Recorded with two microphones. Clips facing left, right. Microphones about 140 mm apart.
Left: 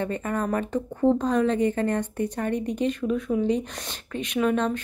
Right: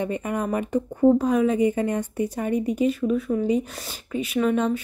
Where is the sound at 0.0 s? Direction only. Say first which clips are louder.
Right 1 dB; 15° right (ahead or behind).